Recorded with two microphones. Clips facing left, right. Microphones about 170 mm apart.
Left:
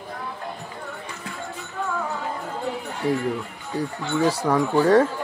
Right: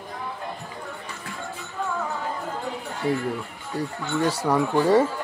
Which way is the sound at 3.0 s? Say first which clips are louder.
Left 2 dB; centre (ahead or behind).